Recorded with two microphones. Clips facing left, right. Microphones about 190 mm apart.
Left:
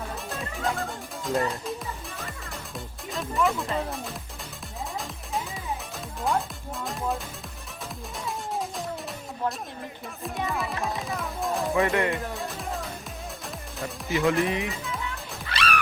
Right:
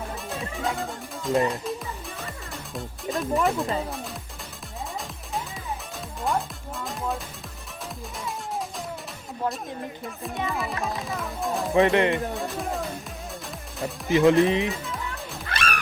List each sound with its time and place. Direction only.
0.3 s speech: centre (ahead or behind)
1.5 s music: centre (ahead or behind)
3.4 s speech: centre (ahead or behind)
6.2 s speech: centre (ahead or behind)
10.2 s speech: centre (ahead or behind)
11.8 s speech: 20° right (ahead or behind)
12.1 s speech: centre (ahead or behind)
14.1 s speech: 25° right (ahead or behind)
15.4 s music: 50° right (ahead or behind)